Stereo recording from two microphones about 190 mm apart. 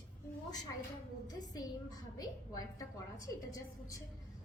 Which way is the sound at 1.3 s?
20° left (ahead or behind).